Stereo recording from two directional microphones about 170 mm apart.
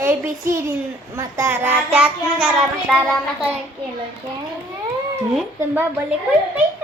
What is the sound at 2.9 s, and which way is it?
Speech, centre (ahead or behind).